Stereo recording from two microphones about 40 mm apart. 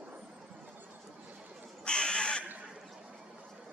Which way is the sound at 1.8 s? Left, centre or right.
Left.